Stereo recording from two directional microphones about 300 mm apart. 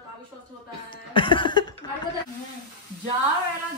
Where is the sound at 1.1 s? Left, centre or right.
Centre.